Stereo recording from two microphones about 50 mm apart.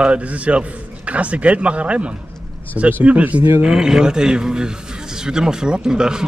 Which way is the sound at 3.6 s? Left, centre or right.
Centre.